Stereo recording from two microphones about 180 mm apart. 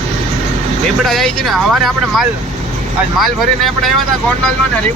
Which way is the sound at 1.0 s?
Centre (ahead or behind).